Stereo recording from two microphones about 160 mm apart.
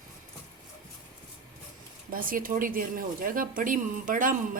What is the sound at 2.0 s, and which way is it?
Speech, 60° right (ahead or behind).